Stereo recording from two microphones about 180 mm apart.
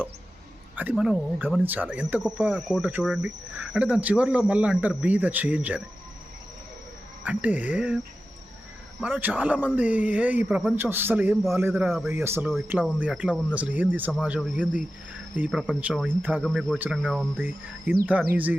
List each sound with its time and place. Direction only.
0.8 s speech: 5° right (ahead or behind)
1.6 s speech: 10° right (ahead or behind)
7.3 s speech: 10° right (ahead or behind)